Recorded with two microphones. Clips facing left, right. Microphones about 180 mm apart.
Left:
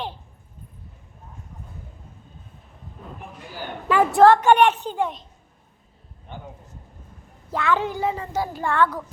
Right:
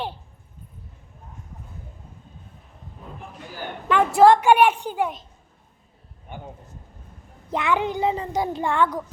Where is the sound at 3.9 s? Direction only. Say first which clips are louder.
Left 1 dB; 5° left (ahead or behind).